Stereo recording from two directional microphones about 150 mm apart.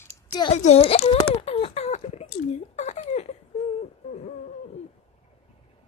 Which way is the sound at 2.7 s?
50° left (ahead or behind).